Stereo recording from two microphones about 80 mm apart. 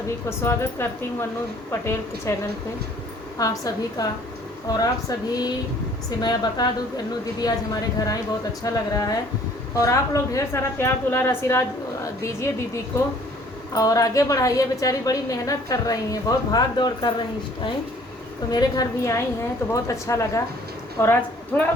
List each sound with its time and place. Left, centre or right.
0.3 s a woman's voice: left
3.3 s a woman's voice: left
13.7 s a woman's voice: left
18.5 s a woman's voice: left
19.7 s a woman's voice: left
21.0 s a woman's voice: left